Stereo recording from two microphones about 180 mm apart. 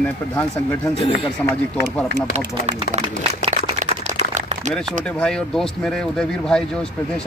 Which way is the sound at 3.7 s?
40° right (ahead or behind).